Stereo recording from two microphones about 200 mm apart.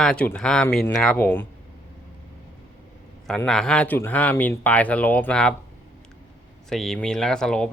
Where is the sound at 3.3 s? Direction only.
Centre (ahead or behind).